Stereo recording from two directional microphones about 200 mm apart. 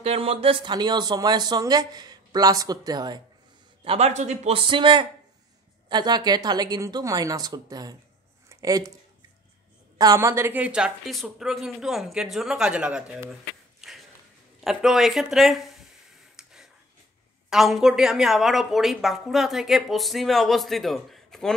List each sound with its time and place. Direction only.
0.0 s speech: 30° right (ahead or behind)
3.8 s speech: 30° right (ahead or behind)
8.5 s a sound: 15° right (ahead or behind)
9.9 s a woman's voice: 15° right (ahead or behind); by 15.8 s centre (ahead or behind)
16.4 s a sound: 5° right (ahead or behind)
17.5 s a woman's voice: centre (ahead or behind)